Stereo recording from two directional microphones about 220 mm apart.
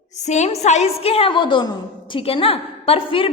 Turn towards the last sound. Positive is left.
turn(degrees=25)  # may be behind; listen again after turning